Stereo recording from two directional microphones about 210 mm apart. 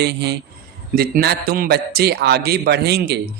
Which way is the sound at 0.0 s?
50° right (ahead or behind).